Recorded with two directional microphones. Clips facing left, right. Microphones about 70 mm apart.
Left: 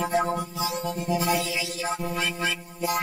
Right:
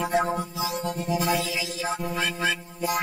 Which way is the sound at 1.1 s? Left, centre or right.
Centre.